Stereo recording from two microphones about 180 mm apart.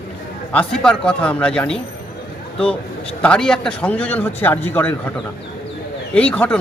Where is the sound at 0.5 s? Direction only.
5° left (ahead or behind).